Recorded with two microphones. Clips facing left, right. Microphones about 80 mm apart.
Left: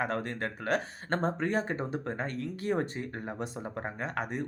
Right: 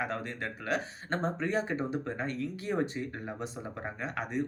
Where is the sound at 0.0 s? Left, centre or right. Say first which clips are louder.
Left 3 dB; left.